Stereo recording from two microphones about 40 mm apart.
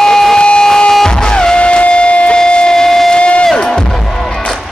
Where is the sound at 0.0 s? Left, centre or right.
Centre.